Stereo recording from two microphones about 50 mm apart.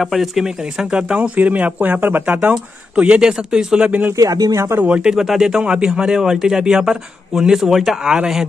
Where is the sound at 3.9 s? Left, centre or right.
Right.